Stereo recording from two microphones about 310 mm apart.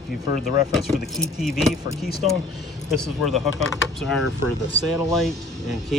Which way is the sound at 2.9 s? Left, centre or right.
Centre.